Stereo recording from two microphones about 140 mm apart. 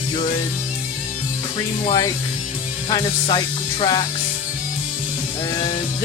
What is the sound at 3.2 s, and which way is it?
Music, 35° left (ahead or behind).